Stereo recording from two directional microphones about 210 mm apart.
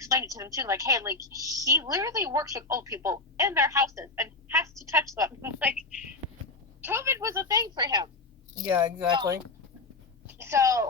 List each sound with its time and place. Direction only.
0.0 s a woman's voice: 15° right (ahead or behind)